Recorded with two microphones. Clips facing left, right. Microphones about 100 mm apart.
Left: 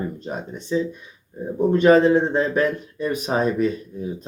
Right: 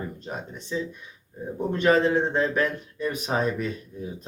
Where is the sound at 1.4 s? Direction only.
10° left (ahead or behind).